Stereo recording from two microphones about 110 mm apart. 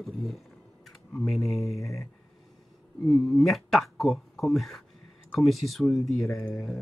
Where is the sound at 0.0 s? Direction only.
Centre (ahead or behind).